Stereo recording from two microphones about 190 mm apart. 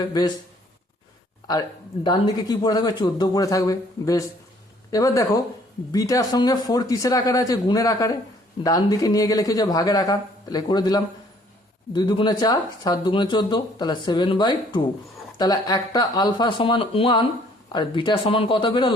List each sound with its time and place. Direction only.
0.0 s speech: 20° left (ahead or behind)
2.0 s speech: 25° left (ahead or behind)